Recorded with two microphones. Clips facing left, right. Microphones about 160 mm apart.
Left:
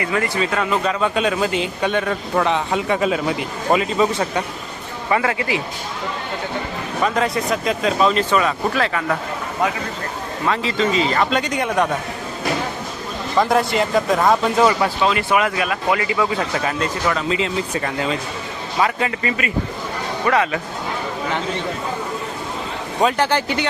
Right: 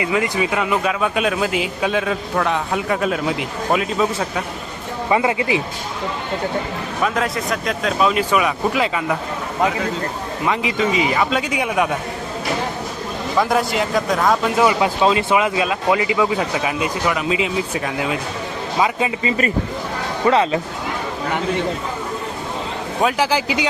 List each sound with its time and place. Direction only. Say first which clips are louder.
0.0 s speech: right 1 dB; 15° right (ahead or behind); by 4.4 s centre (ahead or behind)
5.0 s a man's voice: right 2 dB; 20° right (ahead or behind)
7.0 s speech: left 2 dB; centre (ahead or behind); by 9.1 s 15° right (ahead or behind)
10.4 s speech: even; 15° right (ahead or behind)
13.4 s speech: left 2 dB; centre (ahead or behind)
14.6 s speech: right 1 dB; 10° right (ahead or behind)
18.8 s a man's voice: even; 15° right (ahead or behind)
23.0 s speech: left 1 dB; 5° right (ahead or behind)